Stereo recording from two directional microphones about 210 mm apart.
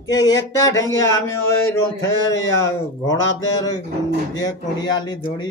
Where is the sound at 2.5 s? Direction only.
15° left (ahead or behind).